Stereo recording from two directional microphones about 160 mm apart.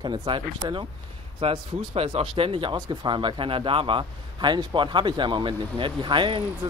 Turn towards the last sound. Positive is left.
turn(degrees=-30)  # may be behind; listen again after turning